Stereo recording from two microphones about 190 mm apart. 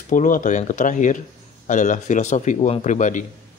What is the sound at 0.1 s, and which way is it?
Speech, 45° left (ahead or behind).